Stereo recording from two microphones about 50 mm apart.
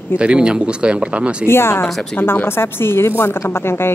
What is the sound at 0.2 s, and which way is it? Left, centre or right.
Speech, centre.